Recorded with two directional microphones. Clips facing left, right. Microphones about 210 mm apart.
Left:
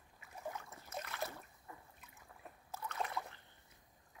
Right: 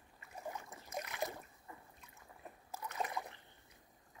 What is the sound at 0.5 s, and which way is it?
Boat, 15° right (ahead or behind).